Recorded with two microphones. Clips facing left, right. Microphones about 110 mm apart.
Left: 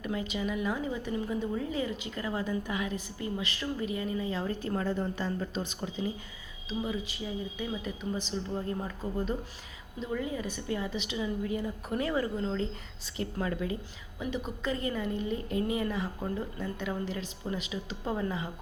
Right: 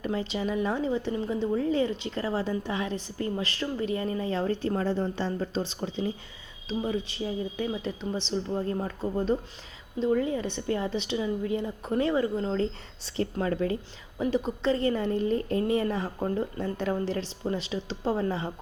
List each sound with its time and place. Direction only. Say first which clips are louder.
0.0 s a woman's voice: right 3 dB; 30° right (ahead or behind)
7.2 s a woman's voice: right 5 dB; 30° right (ahead or behind)
13.5 s a woman's voice: right 6 dB; 45° right (ahead or behind)